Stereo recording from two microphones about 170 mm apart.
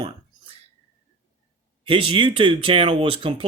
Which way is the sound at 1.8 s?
30° right (ahead or behind).